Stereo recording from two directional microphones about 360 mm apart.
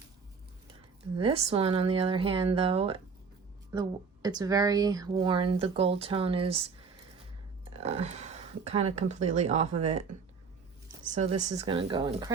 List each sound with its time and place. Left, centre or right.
1.2 s speech: centre
7.8 s speech: centre